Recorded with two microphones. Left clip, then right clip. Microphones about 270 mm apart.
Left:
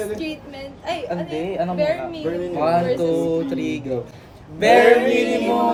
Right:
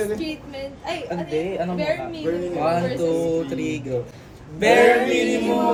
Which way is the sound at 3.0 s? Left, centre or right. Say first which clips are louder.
Left 1 dB; left.